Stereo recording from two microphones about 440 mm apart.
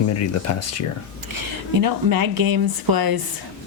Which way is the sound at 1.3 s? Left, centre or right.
Right.